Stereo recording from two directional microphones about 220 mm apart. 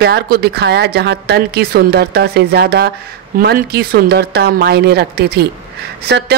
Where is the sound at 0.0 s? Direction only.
45° right (ahead or behind).